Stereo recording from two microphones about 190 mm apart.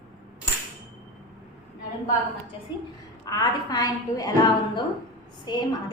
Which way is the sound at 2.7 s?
25° left (ahead or behind).